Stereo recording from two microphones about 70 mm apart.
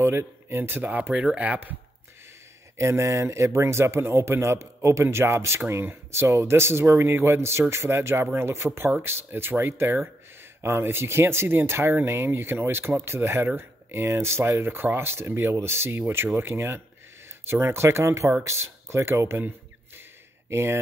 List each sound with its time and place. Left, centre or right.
0.0 s speech: right
0.8 s speech: right
2.8 s speech: right